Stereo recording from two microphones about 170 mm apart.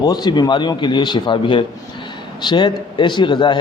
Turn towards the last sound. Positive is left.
turn(degrees=30)  # may be behind; listen again after turning